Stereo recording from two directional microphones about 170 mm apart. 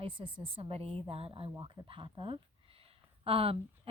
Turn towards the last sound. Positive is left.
turn(degrees=-35)  # may be behind; listen again after turning